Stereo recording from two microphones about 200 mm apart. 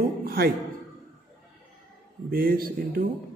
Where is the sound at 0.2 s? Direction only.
50° right (ahead or behind).